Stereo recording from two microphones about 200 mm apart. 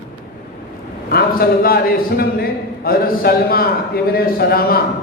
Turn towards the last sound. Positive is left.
turn(degrees=50)  # may be behind; listen again after turning